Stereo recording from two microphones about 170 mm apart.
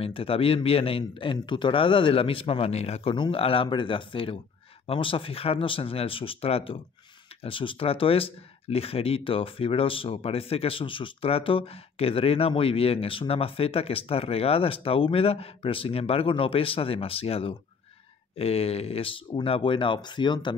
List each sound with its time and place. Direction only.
0.0 s speech: 35° left (ahead or behind)